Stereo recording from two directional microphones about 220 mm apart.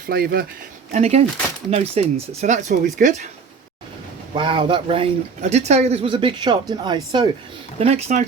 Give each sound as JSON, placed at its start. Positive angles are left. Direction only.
{"t": 0.1, "sound": "speech", "side_deg": -45}
{"t": 0.9, "sound": "speech", "side_deg": -30}
{"t": 4.4, "sound": "speech", "side_deg": -20}